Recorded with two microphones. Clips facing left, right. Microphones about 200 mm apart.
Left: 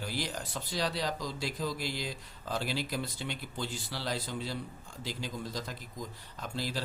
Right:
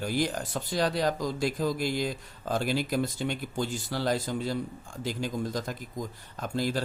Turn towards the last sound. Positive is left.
turn(degrees=-50)  # may be behind; listen again after turning